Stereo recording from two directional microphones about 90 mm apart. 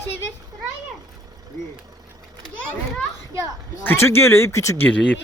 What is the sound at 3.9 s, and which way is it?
Speech, 30° left (ahead or behind).